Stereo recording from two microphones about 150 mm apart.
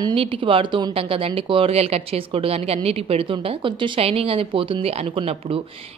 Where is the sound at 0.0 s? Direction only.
35° right (ahead or behind).